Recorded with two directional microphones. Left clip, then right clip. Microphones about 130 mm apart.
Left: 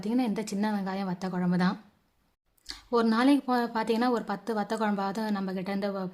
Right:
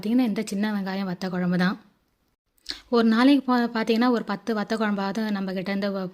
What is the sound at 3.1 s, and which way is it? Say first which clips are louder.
A woman's voice: right 5 dB; 20° right (ahead or behind).